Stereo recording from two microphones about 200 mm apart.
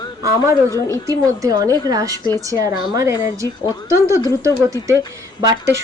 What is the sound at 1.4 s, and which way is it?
A woman's voice, 20° right (ahead or behind).